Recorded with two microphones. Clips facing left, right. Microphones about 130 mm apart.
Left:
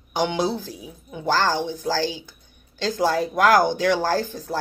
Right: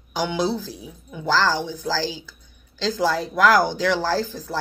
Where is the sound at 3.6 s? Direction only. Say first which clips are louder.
Left 1 dB; 20° left (ahead or behind).